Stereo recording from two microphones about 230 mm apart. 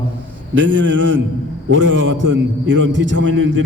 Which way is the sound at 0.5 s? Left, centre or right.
Right.